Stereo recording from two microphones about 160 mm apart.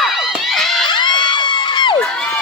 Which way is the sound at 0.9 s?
30° left (ahead or behind).